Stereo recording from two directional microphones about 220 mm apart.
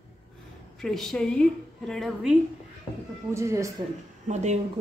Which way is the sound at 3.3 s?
15° right (ahead or behind).